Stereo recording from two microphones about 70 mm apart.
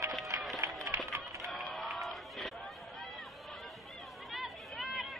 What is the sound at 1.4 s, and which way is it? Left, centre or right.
Crowd, centre.